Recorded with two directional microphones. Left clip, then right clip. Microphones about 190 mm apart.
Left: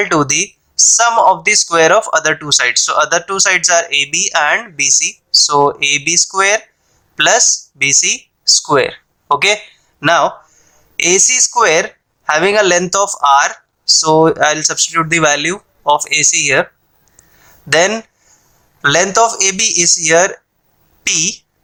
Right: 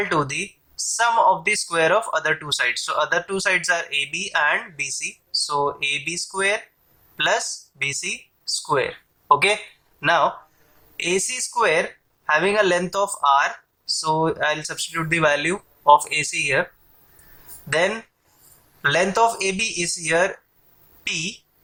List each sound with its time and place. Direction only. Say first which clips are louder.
0.0 s speech: left 9 dB; 45° left (ahead or behind)
17.7 s speech: left 9 dB; 45° left (ahead or behind)